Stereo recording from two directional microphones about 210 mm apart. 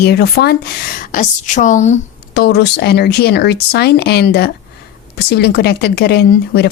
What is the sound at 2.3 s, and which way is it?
Speech, 50° left (ahead or behind).